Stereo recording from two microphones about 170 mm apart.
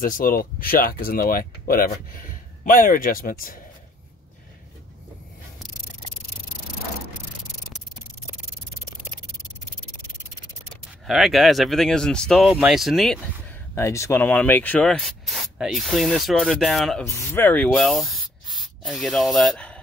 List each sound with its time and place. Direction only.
0.0 s speech: 55° left (ahead or behind)
11.1 s speech: centre (ahead or behind)
13.7 s speech: 15° left (ahead or behind); by 17.0 s centre (ahead or behind)
17.0 s speech: 15° left (ahead or behind)